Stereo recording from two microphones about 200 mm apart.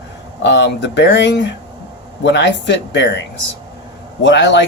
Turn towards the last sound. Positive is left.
turn(degrees=60)  # may be behind; listen again after turning